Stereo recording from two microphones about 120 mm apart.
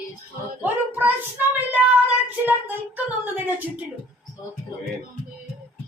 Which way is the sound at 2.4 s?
15° right (ahead or behind).